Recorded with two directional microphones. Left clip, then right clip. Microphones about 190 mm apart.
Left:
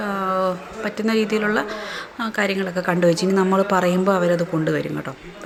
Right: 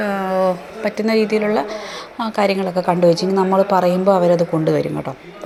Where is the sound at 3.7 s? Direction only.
35° left (ahead or behind).